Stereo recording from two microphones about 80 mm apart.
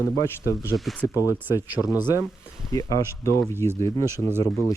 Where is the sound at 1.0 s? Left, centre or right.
Right.